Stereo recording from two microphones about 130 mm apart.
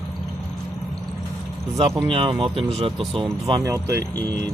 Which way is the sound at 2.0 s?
45° right (ahead or behind).